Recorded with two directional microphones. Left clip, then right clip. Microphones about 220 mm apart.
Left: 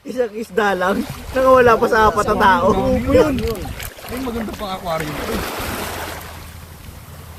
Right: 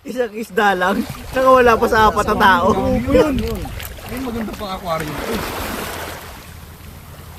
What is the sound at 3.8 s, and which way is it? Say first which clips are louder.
Boat: left 1 dB; 10° left (ahead or behind).